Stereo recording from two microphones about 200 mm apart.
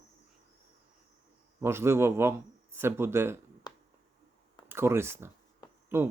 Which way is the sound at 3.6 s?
20° left (ahead or behind).